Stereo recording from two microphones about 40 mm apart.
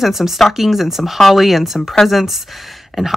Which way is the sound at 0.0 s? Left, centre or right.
Centre.